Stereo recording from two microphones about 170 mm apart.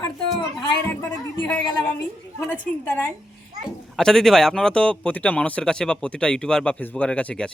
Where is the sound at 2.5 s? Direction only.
10° left (ahead or behind).